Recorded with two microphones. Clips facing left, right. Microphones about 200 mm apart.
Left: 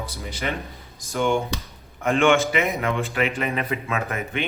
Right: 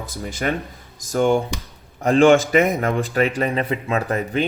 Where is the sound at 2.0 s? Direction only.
35° right (ahead or behind).